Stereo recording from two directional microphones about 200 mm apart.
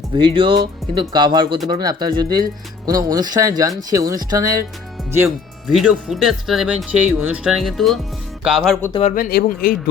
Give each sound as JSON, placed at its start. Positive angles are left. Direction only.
{"t": 0.1, "sound": "speech", "side_deg": -25}
{"t": 8.9, "sound": "speech", "side_deg": 30}
{"t": 9.1, "sound": "a man's voice", "side_deg": 45}